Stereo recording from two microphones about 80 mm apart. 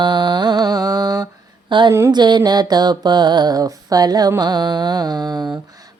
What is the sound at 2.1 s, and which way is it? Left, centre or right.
Mantra, right.